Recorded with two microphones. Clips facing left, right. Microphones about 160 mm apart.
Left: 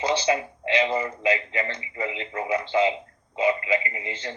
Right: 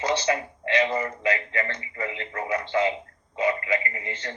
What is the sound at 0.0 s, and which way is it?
Speech, 10° left (ahead or behind).